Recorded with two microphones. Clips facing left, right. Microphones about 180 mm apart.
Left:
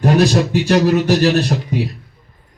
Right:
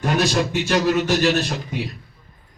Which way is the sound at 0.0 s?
35° left (ahead or behind).